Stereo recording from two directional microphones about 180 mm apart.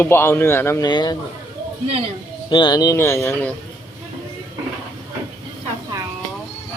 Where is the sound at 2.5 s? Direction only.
25° left (ahead or behind).